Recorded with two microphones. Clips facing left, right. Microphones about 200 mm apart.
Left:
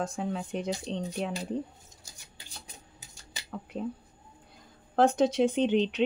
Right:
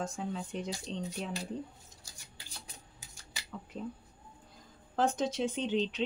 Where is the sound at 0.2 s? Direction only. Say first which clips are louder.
Left 5 dB; 65° left (ahead or behind).